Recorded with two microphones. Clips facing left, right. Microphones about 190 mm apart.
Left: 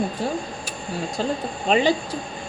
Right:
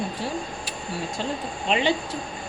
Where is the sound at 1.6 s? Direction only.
40° left (ahead or behind).